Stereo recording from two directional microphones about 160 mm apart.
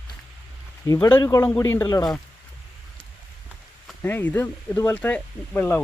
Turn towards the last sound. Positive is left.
turn(degrees=10)  # may be behind; listen again after turning